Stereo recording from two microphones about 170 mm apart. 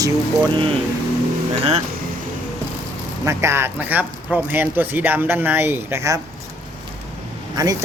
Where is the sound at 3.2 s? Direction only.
15° right (ahead or behind).